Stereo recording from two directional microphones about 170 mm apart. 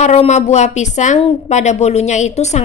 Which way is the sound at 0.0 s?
40° left (ahead or behind).